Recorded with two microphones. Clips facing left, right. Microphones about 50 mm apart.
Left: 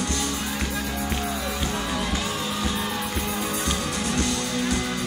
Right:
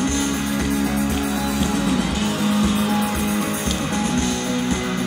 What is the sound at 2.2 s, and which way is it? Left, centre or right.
Music, right.